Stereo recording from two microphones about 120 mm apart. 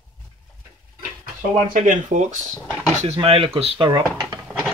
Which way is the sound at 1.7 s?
90° right.